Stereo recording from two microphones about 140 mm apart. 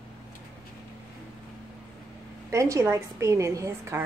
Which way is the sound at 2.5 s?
20° right (ahead or behind).